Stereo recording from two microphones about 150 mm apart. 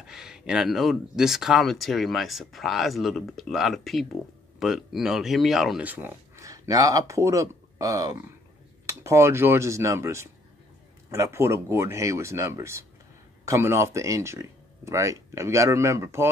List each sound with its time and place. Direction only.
0.0 s speech: 5° right (ahead or behind)